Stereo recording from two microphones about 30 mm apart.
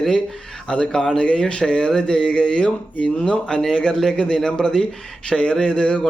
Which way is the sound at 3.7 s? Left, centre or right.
Left.